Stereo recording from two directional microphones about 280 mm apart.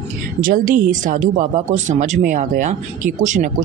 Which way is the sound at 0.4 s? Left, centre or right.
Right.